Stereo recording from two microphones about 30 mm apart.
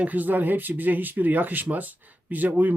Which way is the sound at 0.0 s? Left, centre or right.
Right.